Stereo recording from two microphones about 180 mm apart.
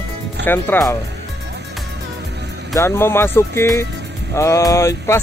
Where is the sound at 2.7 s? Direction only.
15° left (ahead or behind).